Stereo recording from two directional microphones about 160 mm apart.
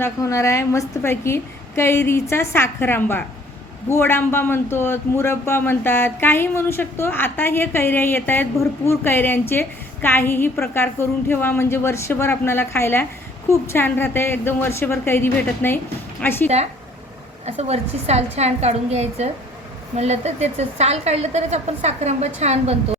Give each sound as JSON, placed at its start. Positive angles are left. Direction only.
{"t": 0.0, "sound": "a man's voice", "side_deg": 20}
{"t": 17.4, "sound": "a woman's voice", "side_deg": -40}